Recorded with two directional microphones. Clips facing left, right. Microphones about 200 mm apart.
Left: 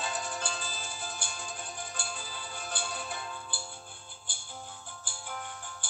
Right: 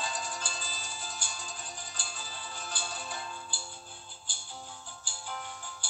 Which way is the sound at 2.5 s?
55° left (ahead or behind).